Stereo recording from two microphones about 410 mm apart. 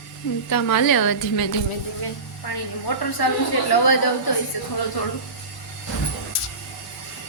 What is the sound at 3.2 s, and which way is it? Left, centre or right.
Speech, left.